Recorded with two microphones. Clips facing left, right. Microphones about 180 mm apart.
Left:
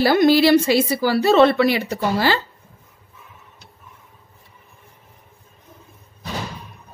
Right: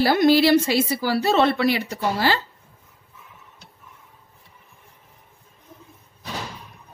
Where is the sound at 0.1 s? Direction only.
85° left.